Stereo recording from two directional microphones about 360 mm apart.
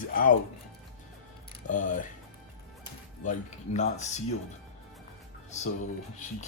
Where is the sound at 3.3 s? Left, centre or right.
Centre.